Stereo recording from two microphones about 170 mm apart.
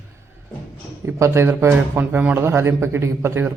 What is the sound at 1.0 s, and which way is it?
A man's voice, 15° right (ahead or behind).